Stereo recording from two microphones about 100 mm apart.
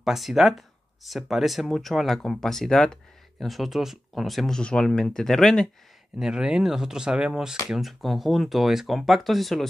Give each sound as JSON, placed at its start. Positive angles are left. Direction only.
{"t": 0.0, "sound": "speech", "side_deg": -5}
{"t": 6.1, "sound": "speech", "side_deg": -5}